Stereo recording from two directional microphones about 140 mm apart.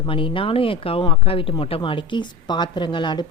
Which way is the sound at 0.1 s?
40° left (ahead or behind).